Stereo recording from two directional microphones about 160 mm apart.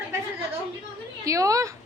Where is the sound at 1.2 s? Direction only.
20° right (ahead or behind).